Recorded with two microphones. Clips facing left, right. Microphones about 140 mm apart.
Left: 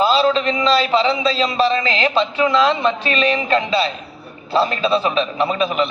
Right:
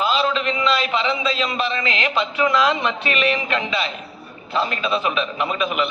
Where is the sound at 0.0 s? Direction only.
35° left (ahead or behind).